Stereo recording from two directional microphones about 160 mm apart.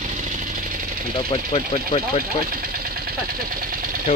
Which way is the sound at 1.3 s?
50° left (ahead or behind).